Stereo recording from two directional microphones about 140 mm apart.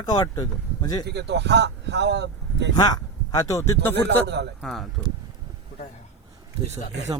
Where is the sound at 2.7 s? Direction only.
25° left (ahead or behind).